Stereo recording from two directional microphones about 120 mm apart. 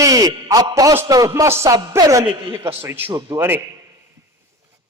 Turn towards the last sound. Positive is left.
turn(degrees=-20)  # may be behind; listen again after turning